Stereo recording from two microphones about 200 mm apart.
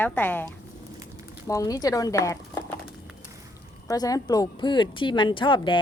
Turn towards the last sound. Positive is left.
turn(degrees=25)  # may be behind; listen again after turning